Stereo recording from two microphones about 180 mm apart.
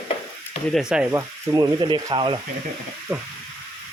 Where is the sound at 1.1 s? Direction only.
20° right (ahead or behind).